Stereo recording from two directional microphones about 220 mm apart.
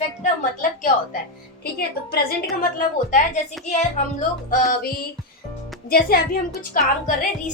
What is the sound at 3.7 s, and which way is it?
A woman's voice, 30° left (ahead or behind).